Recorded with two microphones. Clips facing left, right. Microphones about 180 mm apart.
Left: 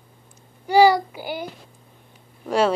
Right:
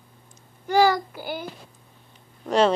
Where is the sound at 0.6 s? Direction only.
10° left (ahead or behind).